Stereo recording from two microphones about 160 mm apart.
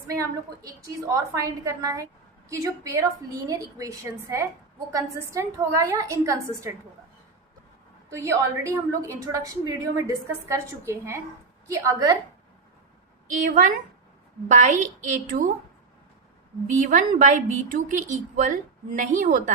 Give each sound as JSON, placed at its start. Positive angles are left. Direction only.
{"t": 0.1, "sound": "a woman's voice", "side_deg": -20}
{"t": 8.1, "sound": "a woman's voice", "side_deg": -20}
{"t": 13.3, "sound": "a woman's voice", "side_deg": -55}
{"t": 16.6, "sound": "a woman's voice", "side_deg": -50}